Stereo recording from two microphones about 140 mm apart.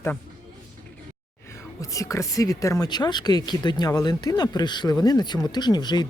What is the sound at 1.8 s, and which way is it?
Speech, 25° left (ahead or behind).